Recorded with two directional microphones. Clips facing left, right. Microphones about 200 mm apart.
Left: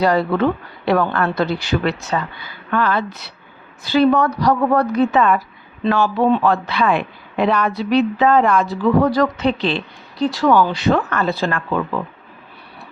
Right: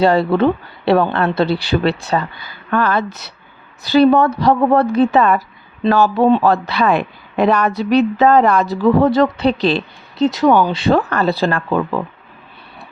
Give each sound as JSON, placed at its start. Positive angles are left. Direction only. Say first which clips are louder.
{"t": 0.0, "sound": "speech", "louder": "right 3 dB", "side_deg": -30}
{"t": 9.0, "sound": "speech", "louder": "right 3 dB", "side_deg": -25}
{"t": 10.2, "sound": "speech", "louder": "right 2 dB", "side_deg": -20}